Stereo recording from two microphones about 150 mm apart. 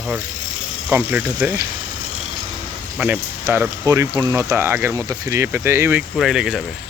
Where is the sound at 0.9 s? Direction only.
15° right (ahead or behind).